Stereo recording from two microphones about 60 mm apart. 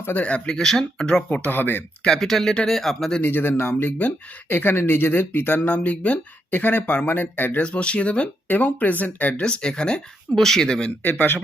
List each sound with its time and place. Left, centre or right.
0.2 s speech: left
1.3 s speech: left
2.0 s speech: centre
3.2 s speech: left
5.6 s speech: left
7.6 s speech: centre
9.4 s speech: centre